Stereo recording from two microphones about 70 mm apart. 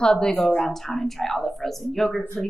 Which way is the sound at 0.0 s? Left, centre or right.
Centre.